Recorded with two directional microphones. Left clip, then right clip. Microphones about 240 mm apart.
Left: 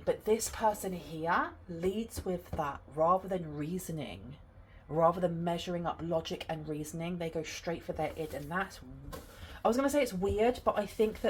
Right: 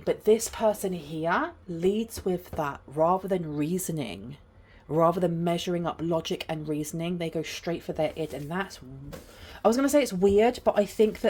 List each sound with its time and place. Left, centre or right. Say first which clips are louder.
0.0 s speech: right 7 dB; right
9.6 s speech: right 6 dB; right